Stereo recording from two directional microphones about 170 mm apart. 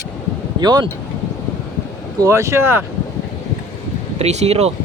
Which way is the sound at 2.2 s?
15° right (ahead or behind).